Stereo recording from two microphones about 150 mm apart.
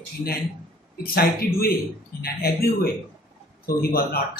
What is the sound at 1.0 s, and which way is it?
Speech, 85° left.